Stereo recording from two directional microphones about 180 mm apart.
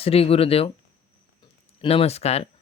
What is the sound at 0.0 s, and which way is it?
Speech, 35° left (ahead or behind).